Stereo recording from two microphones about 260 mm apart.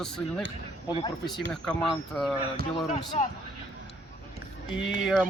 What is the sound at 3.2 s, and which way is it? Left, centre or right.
Speech, left.